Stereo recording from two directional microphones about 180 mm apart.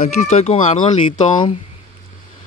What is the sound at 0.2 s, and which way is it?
Speech, 35° left (ahead or behind).